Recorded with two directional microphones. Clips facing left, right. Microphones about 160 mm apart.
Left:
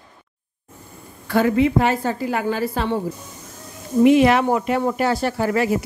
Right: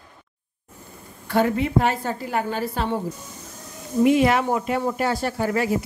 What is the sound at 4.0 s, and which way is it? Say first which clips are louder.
Speech: left 4 dB; 75° left (ahead or behind).